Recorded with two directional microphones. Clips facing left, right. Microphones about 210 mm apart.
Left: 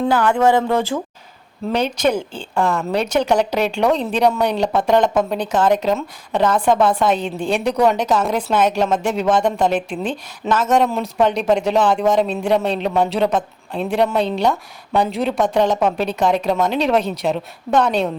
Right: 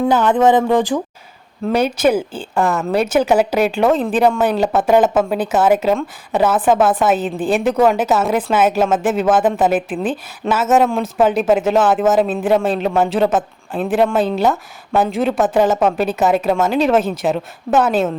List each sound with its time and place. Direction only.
0.1 s speech: 20° right (ahead or behind); by 18.1 s 5° right (ahead or behind)